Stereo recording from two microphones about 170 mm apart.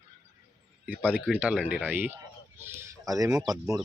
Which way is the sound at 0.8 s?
10° right (ahead or behind).